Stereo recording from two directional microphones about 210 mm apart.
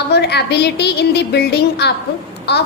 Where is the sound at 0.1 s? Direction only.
50° left (ahead or behind).